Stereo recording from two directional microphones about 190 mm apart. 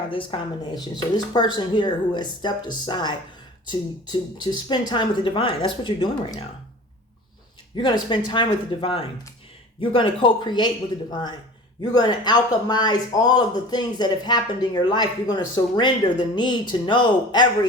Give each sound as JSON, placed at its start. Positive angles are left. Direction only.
{"t": 0.1, "sound": "speech", "side_deg": 25}
{"t": 7.8, "sound": "speech", "side_deg": 25}
{"t": 11.8, "sound": "speech", "side_deg": 20}